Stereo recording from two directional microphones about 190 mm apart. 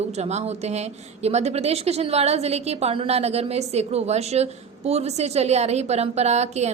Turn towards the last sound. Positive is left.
turn(degrees=-35)  # may be behind; listen again after turning